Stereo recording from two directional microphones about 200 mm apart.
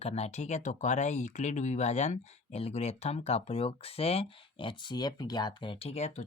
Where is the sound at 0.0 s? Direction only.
30° left (ahead or behind).